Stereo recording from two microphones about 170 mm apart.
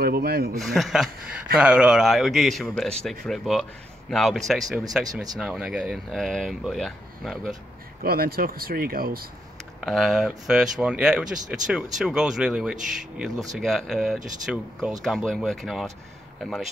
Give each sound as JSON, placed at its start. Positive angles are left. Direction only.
{"t": 0.0, "sound": "speech", "side_deg": -65}
{"t": 0.6, "sound": "speech", "side_deg": 0}
{"t": 5.0, "sound": "speech", "side_deg": -20}
{"t": 5.4, "sound": "speech", "side_deg": -5}
{"t": 8.0, "sound": "speech", "side_deg": -60}
{"t": 9.8, "sound": "speech", "side_deg": 0}